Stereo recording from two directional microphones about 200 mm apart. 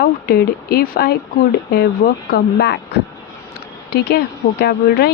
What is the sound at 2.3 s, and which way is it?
Speech, 55° left (ahead or behind).